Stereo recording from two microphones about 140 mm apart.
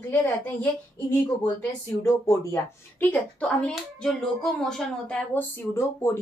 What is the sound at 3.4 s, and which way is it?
A woman's voice, 10° left (ahead or behind).